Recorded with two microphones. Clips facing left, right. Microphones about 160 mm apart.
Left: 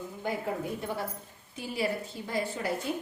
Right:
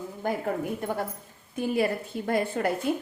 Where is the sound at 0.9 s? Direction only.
50° right (ahead or behind).